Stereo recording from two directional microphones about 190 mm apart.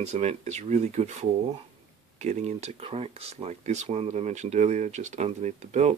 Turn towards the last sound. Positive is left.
turn(degrees=-35)  # may be behind; listen again after turning